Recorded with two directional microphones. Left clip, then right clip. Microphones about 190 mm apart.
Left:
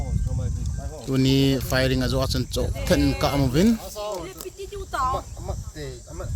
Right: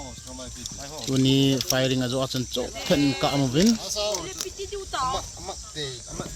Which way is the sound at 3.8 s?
65° left (ahead or behind).